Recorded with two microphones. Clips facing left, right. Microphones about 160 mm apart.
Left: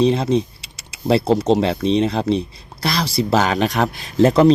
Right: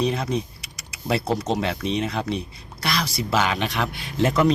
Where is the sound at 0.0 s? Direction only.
30° left (ahead or behind).